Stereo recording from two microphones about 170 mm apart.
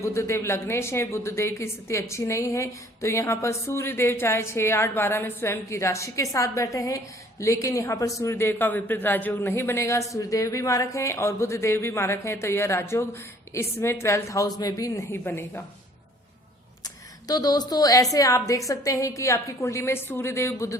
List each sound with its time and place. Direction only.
0.0 s a woman's voice: 15° left (ahead or behind)
17.2 s a woman's voice: 20° left (ahead or behind)